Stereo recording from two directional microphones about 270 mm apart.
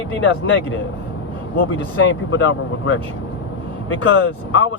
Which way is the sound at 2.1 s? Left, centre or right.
Left.